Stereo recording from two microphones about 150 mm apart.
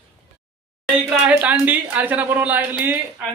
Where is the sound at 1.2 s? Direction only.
10° right (ahead or behind).